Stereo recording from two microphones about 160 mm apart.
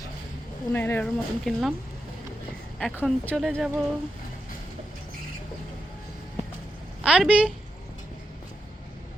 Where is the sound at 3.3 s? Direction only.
Centre (ahead or behind).